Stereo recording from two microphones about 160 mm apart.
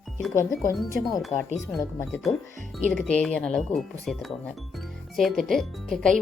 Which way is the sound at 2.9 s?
5° left (ahead or behind).